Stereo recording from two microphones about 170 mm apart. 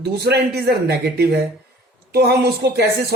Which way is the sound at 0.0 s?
75° right (ahead or behind).